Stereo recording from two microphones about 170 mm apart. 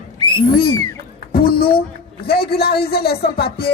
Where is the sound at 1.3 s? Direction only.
65° left (ahead or behind).